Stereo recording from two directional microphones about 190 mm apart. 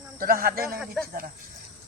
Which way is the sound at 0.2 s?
45° right (ahead or behind).